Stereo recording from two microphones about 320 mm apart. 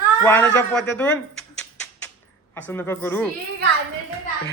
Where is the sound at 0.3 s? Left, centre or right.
Centre.